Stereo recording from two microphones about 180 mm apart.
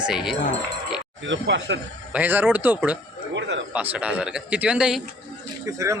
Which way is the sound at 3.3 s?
80° right.